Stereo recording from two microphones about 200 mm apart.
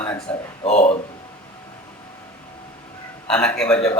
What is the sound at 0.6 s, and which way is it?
Speech, 30° left (ahead or behind).